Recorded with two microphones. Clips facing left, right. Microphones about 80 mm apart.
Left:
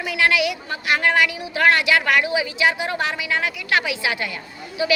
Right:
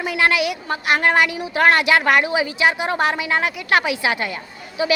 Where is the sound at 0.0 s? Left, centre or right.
Right.